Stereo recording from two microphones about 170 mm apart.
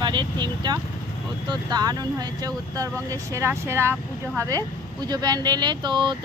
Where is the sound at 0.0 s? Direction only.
25° right (ahead or behind).